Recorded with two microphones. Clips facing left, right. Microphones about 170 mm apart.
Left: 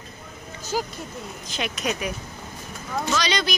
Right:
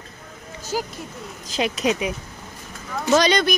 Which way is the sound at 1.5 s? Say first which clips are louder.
Right 6 dB; 30° right (ahead or behind).